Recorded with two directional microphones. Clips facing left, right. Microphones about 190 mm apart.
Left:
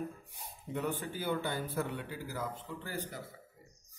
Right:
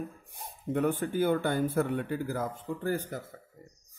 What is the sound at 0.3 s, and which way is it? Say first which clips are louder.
A man's voice: right 8 dB; 50° right (ahead or behind).